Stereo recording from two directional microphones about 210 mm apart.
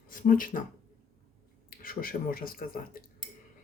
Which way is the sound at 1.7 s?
40° left (ahead or behind).